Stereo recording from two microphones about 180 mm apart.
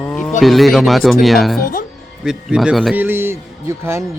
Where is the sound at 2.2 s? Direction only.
5° right (ahead or behind).